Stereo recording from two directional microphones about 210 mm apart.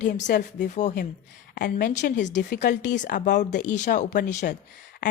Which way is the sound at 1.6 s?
45° left (ahead or behind).